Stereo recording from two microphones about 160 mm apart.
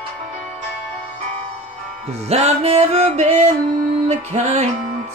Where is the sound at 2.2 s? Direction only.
40° right (ahead or behind).